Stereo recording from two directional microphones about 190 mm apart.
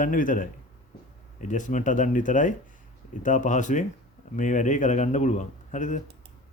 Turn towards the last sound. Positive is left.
turn(degrees=40)  # may be behind; listen again after turning